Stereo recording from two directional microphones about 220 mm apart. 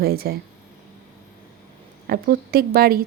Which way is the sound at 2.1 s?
45° right (ahead or behind).